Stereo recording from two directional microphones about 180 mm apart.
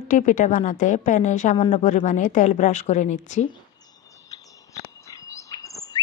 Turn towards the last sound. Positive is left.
turn(degrees=20)  # may be behind; listen again after turning